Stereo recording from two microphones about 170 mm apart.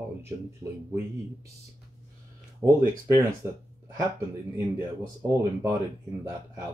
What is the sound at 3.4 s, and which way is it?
Speech, 15° right (ahead or behind).